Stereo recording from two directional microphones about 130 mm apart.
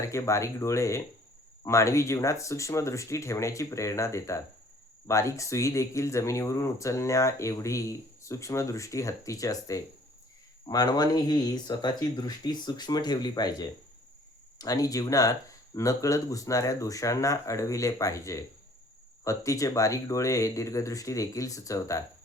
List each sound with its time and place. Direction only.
0.0 s speech: 20° left (ahead or behind)